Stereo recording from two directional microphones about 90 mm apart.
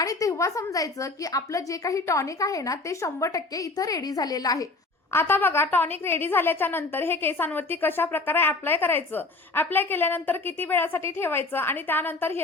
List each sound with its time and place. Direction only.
0.0 s a woman's voice: 40° left (ahead or behind)
5.1 s a woman's voice: 25° left (ahead or behind)